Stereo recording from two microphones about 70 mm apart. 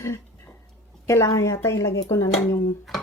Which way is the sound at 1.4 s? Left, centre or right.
Left.